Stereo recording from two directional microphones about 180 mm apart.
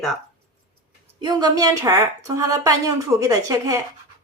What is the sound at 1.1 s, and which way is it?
A woman's voice, 25° right (ahead or behind).